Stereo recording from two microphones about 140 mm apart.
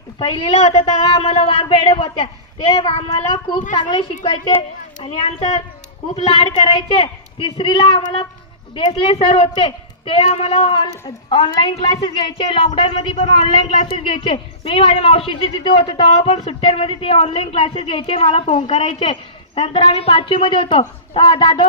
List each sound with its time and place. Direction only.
0.2 s a woman's voice: 40° left (ahead or behind)
18.9 s a woman's voice: 35° left (ahead or behind)